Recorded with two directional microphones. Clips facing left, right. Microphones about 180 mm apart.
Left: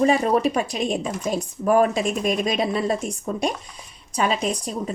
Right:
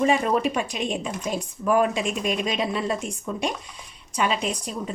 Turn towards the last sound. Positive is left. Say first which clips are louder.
# left 3 dB
turn(degrees=40)  # may be behind; listen again after turning